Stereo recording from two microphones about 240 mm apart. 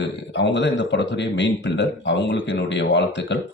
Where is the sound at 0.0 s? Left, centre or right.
Left.